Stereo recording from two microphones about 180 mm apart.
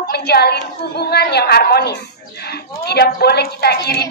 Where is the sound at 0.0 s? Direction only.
60° left (ahead or behind).